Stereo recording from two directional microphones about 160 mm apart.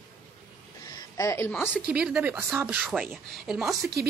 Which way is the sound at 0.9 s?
20° left (ahead or behind).